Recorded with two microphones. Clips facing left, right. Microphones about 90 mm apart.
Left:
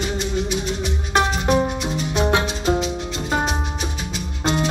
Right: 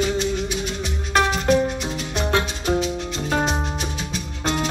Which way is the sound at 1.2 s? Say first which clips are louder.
Even; 15° left (ahead or behind).